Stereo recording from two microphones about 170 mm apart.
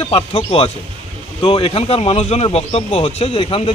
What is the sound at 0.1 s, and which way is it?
Speech, 35° left (ahead or behind).